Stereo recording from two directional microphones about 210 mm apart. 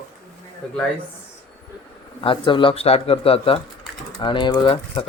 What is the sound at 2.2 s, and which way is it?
Speech, 25° left (ahead or behind).